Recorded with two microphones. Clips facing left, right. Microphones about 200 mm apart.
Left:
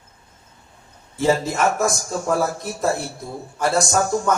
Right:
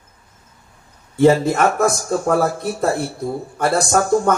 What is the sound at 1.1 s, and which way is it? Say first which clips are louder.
Speech: right 6 dB; 60° right (ahead or behind).